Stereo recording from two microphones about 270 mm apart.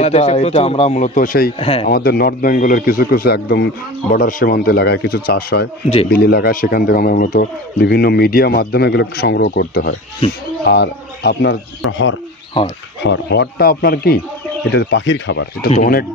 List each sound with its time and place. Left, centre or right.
0.0 s speech: left
1.9 s speech: left
10.2 s speech: centre
10.6 s speech: left
13.0 s speech: left
15.7 s speech: left